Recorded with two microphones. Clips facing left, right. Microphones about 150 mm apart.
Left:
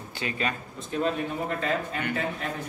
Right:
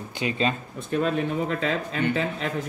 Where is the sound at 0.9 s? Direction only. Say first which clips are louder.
Right 3 dB; 60° right (ahead or behind).